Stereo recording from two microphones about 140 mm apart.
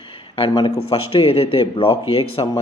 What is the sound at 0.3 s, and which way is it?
A man's voice, 35° left (ahead or behind).